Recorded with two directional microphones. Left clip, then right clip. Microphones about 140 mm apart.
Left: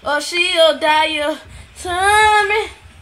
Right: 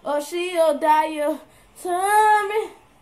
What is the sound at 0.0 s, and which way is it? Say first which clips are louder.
Speech: left 7 dB; 30° left (ahead or behind).